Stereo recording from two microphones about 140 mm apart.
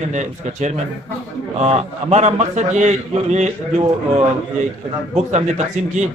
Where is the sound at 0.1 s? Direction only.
60° right (ahead or behind).